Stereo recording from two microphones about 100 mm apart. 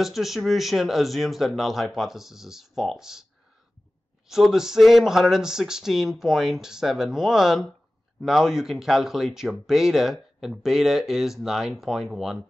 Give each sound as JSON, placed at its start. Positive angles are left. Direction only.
{"t": 0.0, "sound": "speech", "side_deg": 0}
{"t": 4.3, "sound": "speech", "side_deg": -5}